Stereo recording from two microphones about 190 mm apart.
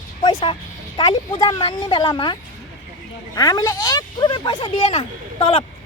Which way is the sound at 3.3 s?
20° left (ahead or behind).